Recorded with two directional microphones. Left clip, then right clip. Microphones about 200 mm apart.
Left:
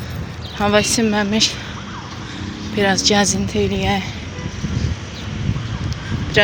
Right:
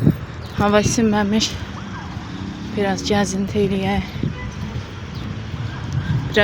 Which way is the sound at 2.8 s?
Centre (ahead or behind).